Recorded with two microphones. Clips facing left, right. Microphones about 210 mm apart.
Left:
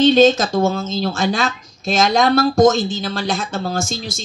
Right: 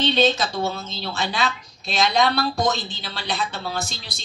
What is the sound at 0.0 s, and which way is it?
Speech, 45° left (ahead or behind).